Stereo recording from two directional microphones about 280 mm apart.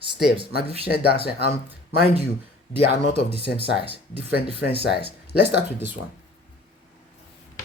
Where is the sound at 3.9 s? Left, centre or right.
Left.